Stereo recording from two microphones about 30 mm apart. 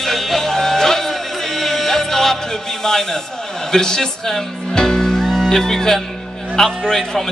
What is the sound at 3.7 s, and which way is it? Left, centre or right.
Speech, centre.